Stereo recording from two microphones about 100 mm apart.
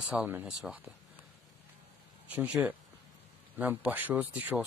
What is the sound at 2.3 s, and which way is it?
A man's voice, 10° right (ahead or behind).